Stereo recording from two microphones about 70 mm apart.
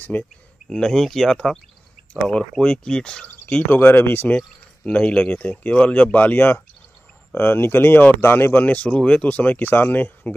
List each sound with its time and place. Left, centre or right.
0.2 s speech: centre
3.8 s speech: left
4.4 s speech: centre